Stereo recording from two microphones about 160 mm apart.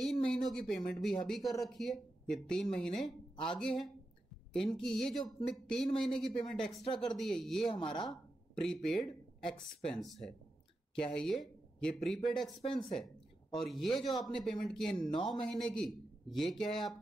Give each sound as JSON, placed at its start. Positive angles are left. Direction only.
{"t": 0.0, "sound": "a sound", "side_deg": 5}
{"t": 1.2, "sound": "speech", "side_deg": 0}
{"t": 7.7, "sound": "speech", "side_deg": 30}
{"t": 8.0, "sound": "speech", "side_deg": 5}